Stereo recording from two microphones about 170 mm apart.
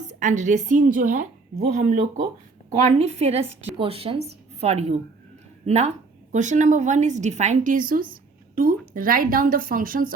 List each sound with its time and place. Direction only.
0.1 s a woman's voice: 45° right (ahead or behind)